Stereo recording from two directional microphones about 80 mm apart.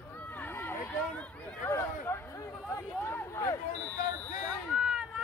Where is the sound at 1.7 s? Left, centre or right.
Left.